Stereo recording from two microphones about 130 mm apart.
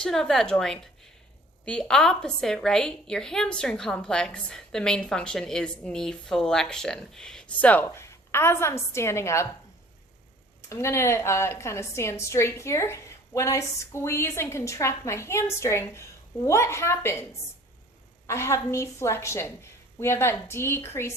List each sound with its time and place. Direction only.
0.0 s a woman's voice: 5° left (ahead or behind); by 9.5 s 20° left (ahead or behind)
10.7 s a woman's voice: 20° left (ahead or behind)
18.3 s a woman's voice: 20° left (ahead or behind)